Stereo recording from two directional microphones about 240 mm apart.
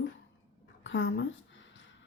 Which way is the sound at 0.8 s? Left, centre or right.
Left.